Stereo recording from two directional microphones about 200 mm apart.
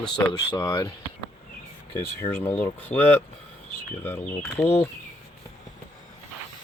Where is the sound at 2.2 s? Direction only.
10° left (ahead or behind).